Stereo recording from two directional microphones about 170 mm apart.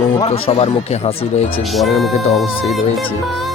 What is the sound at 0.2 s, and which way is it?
Speech, 35° left (ahead or behind).